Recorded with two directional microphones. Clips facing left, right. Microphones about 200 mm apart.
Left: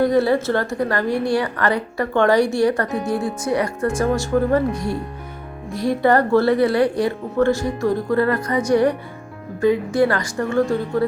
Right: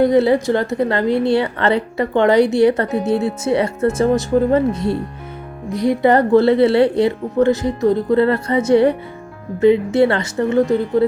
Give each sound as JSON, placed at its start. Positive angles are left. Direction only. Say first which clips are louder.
{"t": 0.0, "sound": "speech", "louder": "right 3 dB", "side_deg": -20}